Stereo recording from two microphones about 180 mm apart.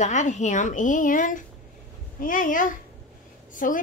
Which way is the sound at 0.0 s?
40° left (ahead or behind).